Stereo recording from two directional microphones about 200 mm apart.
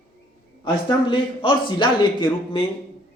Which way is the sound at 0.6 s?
25° left (ahead or behind).